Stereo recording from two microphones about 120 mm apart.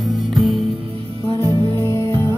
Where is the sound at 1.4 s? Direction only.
30° left (ahead or behind).